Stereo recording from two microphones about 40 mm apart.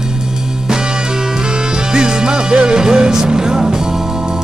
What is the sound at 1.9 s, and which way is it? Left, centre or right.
Music, centre.